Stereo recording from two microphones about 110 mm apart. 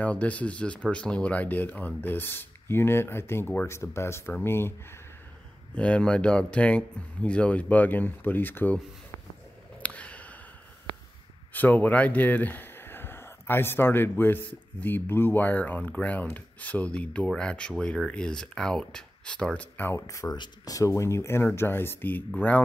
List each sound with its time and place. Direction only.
0.0 s speech: 10° left (ahead or behind)
5.8 s speech: 10° left (ahead or behind)
9.8 s a sound: 10° left (ahead or behind)
11.5 s speech: 15° left (ahead or behind)
20.3 s speech: 35° left (ahead or behind)